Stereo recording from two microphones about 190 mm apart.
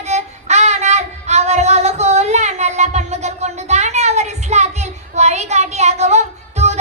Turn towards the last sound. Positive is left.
turn(degrees=-35)  # may be behind; listen again after turning